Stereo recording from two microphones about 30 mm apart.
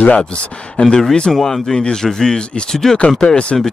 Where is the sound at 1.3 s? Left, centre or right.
Centre.